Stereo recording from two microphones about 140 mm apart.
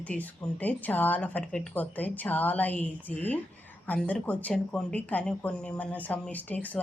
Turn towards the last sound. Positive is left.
turn(degrees=10)  # may be behind; listen again after turning